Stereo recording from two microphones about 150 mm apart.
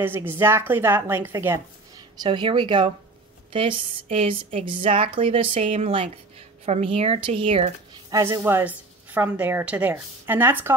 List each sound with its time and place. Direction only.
0.0 s a woman's voice: 15° right (ahead or behind)
2.2 s speech: 30° right (ahead or behind)
8.1 s a woman's voice: 20° right (ahead or behind)